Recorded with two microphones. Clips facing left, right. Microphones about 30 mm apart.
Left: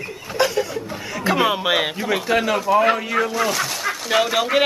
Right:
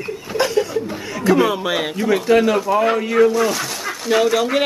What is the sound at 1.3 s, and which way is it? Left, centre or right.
A woman's voice, left.